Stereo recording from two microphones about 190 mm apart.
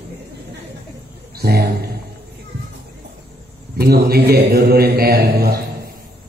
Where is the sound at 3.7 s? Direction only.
55° right (ahead or behind).